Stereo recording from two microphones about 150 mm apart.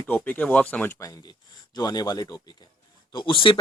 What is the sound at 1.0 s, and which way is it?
Speech, 25° left (ahead or behind).